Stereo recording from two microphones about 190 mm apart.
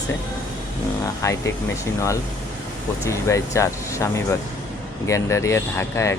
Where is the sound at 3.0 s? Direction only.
15° left (ahead or behind).